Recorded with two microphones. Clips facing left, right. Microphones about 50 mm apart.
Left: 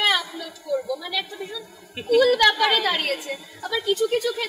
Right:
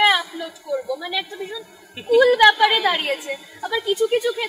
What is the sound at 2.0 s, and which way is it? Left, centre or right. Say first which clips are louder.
A woman's voice: right 4 dB; centre.